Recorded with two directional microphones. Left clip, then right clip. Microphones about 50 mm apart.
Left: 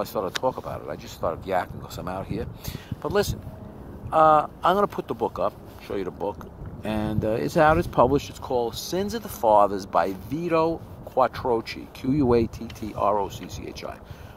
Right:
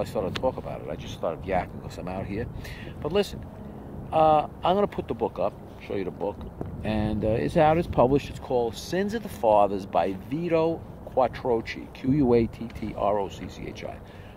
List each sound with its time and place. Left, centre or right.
0.0 s speech: left
0.4 s speech: left; by 5.2 s centre
5.2 s speech: left
6.8 s speech: left
7.4 s speech: left
7.7 s speech: centre